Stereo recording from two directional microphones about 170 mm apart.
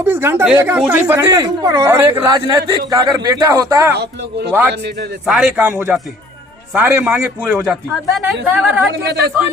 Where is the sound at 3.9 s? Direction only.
75° right (ahead or behind).